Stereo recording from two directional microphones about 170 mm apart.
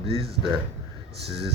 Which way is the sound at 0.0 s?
35° right (ahead or behind).